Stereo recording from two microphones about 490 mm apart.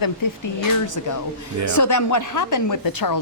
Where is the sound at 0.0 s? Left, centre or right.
Left.